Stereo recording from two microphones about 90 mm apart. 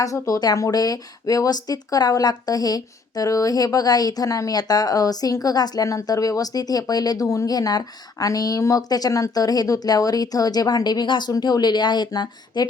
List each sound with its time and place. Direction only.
0.0 s speech: 40° left (ahead or behind)